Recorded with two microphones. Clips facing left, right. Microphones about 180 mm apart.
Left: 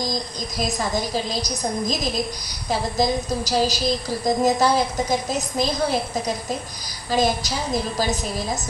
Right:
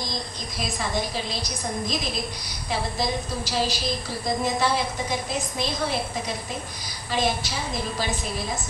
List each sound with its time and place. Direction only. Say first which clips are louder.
0.6 s a woman's voice: left 4 dB; 40° left (ahead or behind)